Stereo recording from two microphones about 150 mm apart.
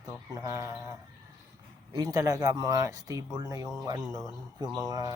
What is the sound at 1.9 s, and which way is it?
Speech, 25° right (ahead or behind).